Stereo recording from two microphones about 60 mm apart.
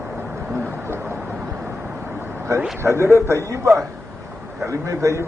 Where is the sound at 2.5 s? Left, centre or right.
Right.